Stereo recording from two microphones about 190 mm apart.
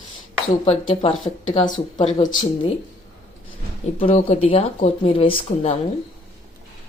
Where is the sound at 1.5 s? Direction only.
40° left (ahead or behind).